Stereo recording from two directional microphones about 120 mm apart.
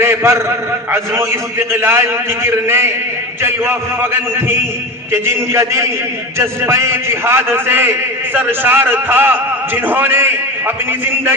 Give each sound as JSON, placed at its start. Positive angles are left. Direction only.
{"t": 0.0, "sound": "a man's voice", "side_deg": -20}